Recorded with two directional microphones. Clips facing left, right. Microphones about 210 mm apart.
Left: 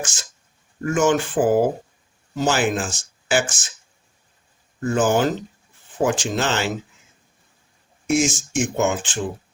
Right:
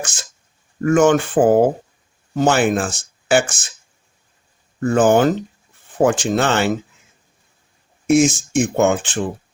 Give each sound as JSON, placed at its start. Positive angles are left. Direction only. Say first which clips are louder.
{"t": 0.9, "sound": "speech", "louder": "right 5 dB", "side_deg": -60}
{"t": 4.8, "sound": "speech", "louder": "right 5 dB", "side_deg": -60}
{"t": 8.1, "sound": "speech", "louder": "right 6 dB", "side_deg": -55}